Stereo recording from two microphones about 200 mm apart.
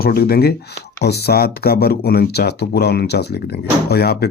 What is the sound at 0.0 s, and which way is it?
Speech, 50° left (ahead or behind).